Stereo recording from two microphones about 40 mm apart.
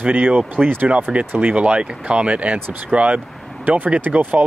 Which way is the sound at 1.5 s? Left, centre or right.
Right.